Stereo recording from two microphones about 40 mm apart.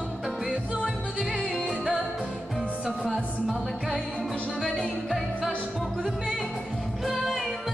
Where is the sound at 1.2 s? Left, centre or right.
Centre.